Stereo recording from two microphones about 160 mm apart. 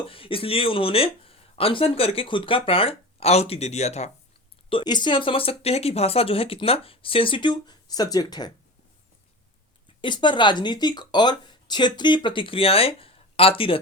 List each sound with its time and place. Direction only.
0.0 s speech: 35° left (ahead or behind)
4.7 s speech: 30° left (ahead or behind)
10.0 s speech: 30° left (ahead or behind)